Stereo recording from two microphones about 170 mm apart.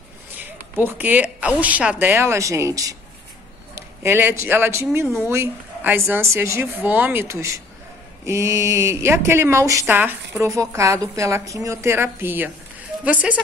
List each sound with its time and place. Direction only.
0.7 s speech: 10° right (ahead or behind)